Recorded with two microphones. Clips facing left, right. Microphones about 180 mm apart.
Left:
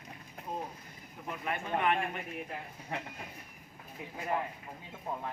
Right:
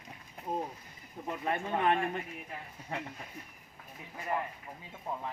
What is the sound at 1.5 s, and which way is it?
Speech, 30° right (ahead or behind).